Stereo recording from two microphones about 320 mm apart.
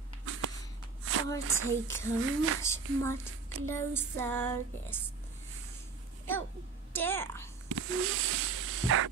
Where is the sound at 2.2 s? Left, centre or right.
Right.